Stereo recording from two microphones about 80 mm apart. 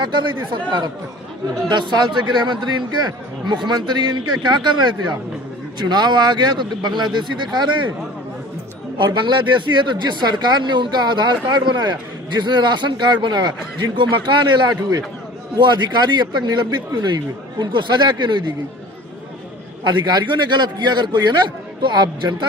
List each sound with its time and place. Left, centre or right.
0.0 s speech: right
1.7 s speech: right
9.0 s speech: right
15.5 s speech: right
19.8 s speech: right